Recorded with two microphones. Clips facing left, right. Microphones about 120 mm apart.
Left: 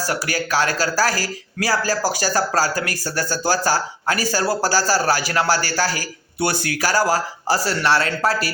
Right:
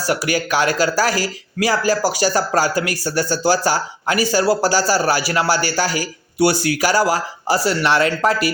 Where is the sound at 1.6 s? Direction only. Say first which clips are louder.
Right 3 dB; 15° right (ahead or behind).